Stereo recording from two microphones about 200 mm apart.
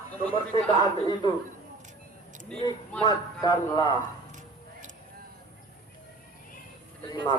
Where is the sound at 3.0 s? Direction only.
20° left (ahead or behind).